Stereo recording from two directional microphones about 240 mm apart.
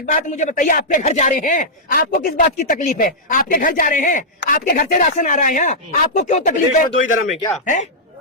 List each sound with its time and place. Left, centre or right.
0.0 s speech: left